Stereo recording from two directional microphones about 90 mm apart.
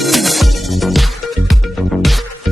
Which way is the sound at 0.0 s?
Centre (ahead or behind).